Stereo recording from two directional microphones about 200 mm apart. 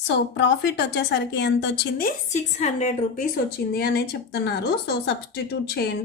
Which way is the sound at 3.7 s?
50° left (ahead or behind).